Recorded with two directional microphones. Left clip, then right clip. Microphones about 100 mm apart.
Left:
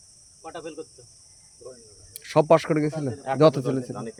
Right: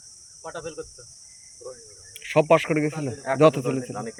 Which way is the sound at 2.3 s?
55° left (ahead or behind).